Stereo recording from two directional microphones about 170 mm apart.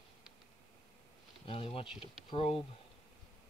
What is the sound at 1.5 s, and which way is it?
Speech, 35° left (ahead or behind).